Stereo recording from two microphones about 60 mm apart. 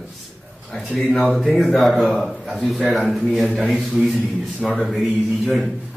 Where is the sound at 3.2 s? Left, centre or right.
Centre.